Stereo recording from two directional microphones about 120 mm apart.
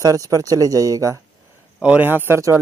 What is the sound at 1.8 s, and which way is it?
Speech, 15° right (ahead or behind).